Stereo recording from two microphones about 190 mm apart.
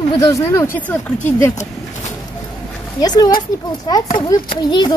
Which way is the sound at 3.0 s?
20° left (ahead or behind).